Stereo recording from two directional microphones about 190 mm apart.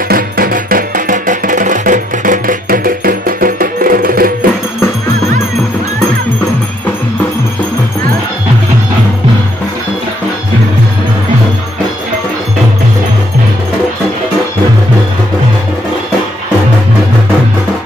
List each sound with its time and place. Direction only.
0.1 s music: 50° right (ahead or behind)